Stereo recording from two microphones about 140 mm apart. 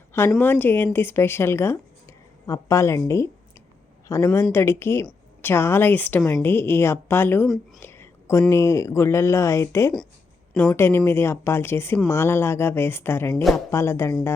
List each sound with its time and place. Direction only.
0.1 s a woman's voice: 15° left (ahead or behind)
13.3 s speech: centre (ahead or behind)
13.7 s speech: 20° left (ahead or behind)